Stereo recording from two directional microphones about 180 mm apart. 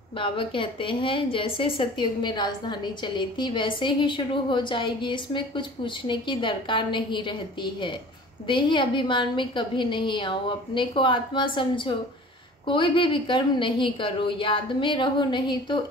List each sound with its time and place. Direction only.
0.2 s a woman's voice: 30° left (ahead or behind)